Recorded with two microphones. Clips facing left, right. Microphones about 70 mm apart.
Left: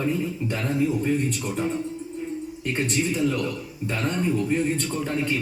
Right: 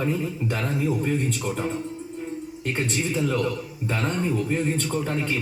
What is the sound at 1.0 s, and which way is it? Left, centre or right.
Speech, right.